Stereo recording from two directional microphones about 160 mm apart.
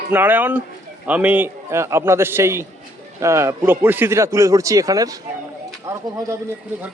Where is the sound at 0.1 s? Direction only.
10° right (ahead or behind).